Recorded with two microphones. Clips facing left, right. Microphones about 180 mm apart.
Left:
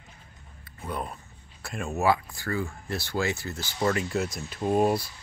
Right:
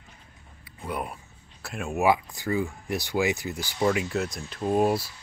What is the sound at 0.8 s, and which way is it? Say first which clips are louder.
Speech: right 1 dB; 10° right (ahead or behind).